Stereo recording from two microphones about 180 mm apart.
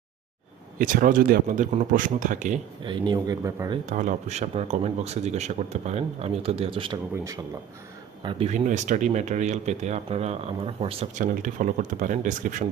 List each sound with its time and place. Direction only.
0.8 s speech: 50° right (ahead or behind)
2.8 s speech: 25° right (ahead or behind)
3.8 s speech: 45° right (ahead or behind); by 8.4 s 25° right (ahead or behind)
8.4 s speech: 40° right (ahead or behind)
11.1 s speech: 45° right (ahead or behind)